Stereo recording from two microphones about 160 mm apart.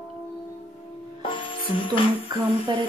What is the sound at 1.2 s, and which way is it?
Music, 30° left (ahead or behind).